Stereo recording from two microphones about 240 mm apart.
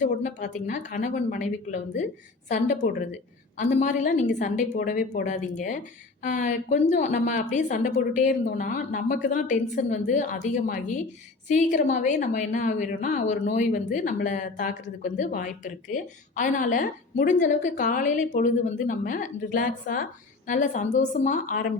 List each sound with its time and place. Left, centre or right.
0.0 s a woman's voice: left
2.5 s a woman's voice: left